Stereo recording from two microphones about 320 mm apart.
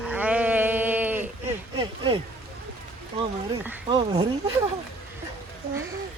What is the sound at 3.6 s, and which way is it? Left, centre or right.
Speech, centre.